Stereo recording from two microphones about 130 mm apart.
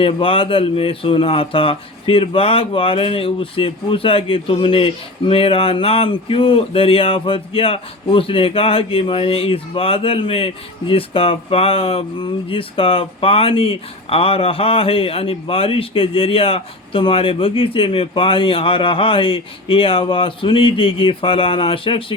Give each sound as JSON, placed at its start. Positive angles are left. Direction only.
{"t": 0.0, "sound": "speech", "side_deg": 45}